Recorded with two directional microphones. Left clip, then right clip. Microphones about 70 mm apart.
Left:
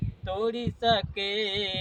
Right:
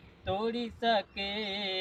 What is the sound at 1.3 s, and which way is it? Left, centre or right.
Mantra, left.